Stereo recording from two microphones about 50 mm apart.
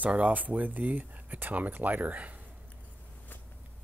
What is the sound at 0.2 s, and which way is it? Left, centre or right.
Speech, right.